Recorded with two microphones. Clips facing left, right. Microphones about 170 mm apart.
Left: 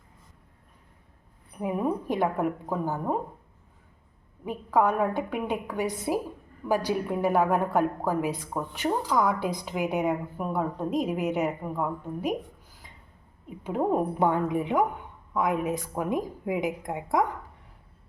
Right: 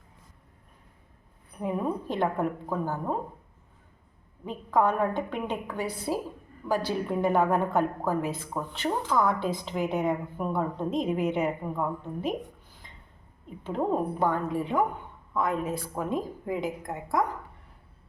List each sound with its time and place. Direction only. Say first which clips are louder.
1.5 s speech: left 2 dB; 10° left (ahead or behind)
4.4 s speech: left 1 dB; 10° left (ahead or behind)
12.8 s a sound: even; 5° left (ahead or behind)
13.5 s speech: left 2 dB; 15° left (ahead or behind)